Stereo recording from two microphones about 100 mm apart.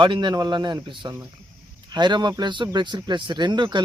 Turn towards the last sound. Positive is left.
turn(degrees=-50)  # may be behind; listen again after turning